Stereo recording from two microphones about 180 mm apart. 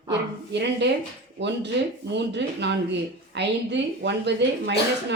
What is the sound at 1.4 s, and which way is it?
Speech, 75° right (ahead or behind).